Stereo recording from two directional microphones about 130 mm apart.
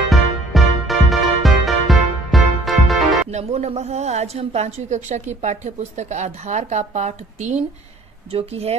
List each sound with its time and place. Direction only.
0.1 s music: centre (ahead or behind)
3.3 s a woman's voice: 55° right (ahead or behind)
8.3 s speech: 50° right (ahead or behind)